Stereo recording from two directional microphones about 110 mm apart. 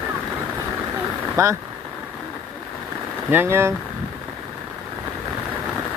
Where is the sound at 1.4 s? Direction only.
30° right (ahead or behind).